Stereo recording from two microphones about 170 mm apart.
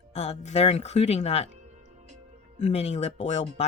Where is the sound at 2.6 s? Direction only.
40° left (ahead or behind).